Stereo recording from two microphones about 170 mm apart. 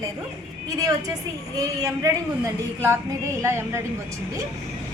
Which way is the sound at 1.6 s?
20° right (ahead or behind).